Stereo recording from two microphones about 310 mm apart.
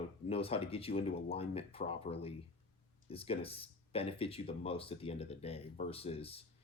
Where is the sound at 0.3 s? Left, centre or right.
Centre.